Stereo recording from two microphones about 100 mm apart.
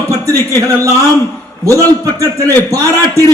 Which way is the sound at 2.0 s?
30° right (ahead or behind).